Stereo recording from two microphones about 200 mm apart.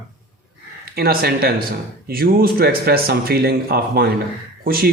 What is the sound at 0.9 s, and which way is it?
A man's voice, 50° right (ahead or behind).